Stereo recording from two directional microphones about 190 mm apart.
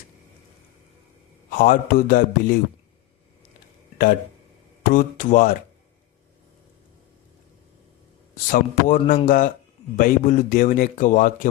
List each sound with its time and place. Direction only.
1.5 s a man's voice: 45° left (ahead or behind)
4.8 s a man's voice: 45° left (ahead or behind)
8.4 s a man's voice: 45° left (ahead or behind)